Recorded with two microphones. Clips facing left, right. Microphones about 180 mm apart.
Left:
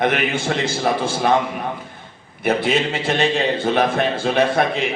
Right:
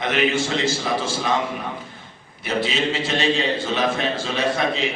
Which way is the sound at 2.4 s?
55° left (ahead or behind).